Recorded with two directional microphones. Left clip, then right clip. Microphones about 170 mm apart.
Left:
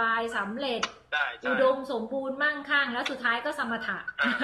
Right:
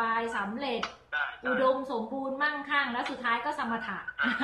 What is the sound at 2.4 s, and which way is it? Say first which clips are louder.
A woman's voice: left 2 dB; 15° right (ahead or behind).